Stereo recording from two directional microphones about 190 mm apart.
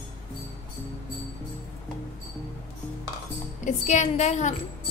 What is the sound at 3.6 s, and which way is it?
Speech, 40° left (ahead or behind).